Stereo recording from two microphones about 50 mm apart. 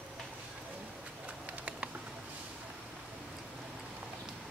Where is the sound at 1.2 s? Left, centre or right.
Right.